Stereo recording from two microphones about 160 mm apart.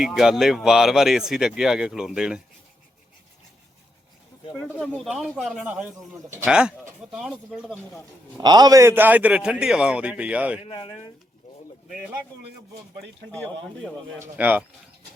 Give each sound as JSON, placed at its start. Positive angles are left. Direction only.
{"t": 0.0, "sound": "speech", "side_deg": -5}
{"t": 4.9, "sound": "speech", "side_deg": 0}
{"t": 8.4, "sound": "a man's voice", "side_deg": -25}
{"t": 10.6, "sound": "speech", "side_deg": 30}
{"t": 13.3, "sound": "speech", "side_deg": 5}
{"t": 14.2, "sound": "a man's voice", "side_deg": -10}